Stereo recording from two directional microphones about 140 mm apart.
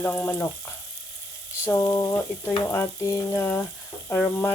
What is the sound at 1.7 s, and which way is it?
Frying, 20° left (ahead or behind).